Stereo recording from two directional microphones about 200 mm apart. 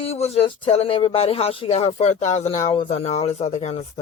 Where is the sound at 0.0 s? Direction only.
30° left (ahead or behind).